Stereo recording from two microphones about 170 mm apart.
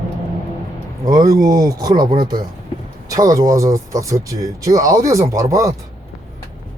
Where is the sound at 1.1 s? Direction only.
20° right (ahead or behind).